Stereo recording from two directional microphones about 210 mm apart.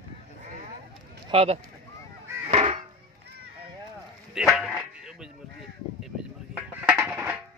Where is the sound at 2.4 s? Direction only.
30° right (ahead or behind).